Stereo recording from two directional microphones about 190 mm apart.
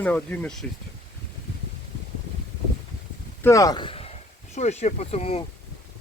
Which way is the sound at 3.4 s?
15° left (ahead or behind).